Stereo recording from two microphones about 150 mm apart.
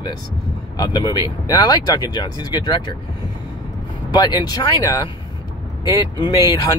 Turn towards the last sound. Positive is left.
turn(degrees=25)  # may be behind; listen again after turning